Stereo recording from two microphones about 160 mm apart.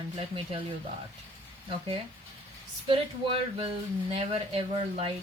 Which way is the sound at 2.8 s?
35° right (ahead or behind).